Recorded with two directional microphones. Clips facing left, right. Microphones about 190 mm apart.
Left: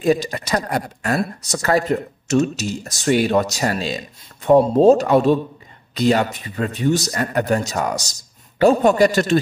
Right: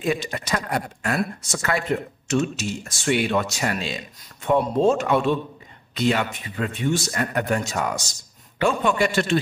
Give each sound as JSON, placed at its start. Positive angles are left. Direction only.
{"t": 0.0, "sound": "speech", "side_deg": 40}